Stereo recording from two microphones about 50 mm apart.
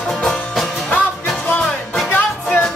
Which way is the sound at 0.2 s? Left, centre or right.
Centre.